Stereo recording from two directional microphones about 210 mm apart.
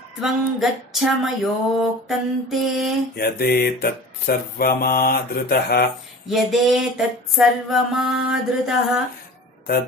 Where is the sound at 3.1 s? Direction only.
45° left (ahead or behind).